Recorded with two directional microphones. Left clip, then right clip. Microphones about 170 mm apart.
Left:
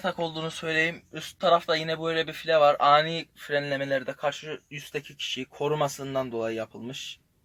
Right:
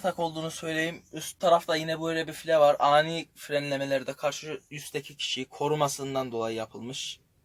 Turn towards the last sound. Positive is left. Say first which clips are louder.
# left 1 dB
turn(degrees=5)  # may be behind; listen again after turning